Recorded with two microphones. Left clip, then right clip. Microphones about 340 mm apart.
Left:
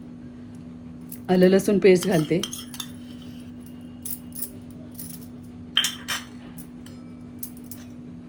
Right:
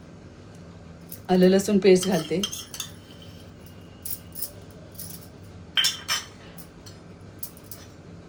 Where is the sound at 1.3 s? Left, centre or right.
Left.